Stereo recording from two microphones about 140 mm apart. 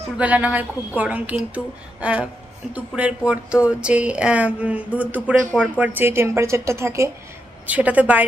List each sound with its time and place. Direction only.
0.2 s a woman's voice: 10° right (ahead or behind)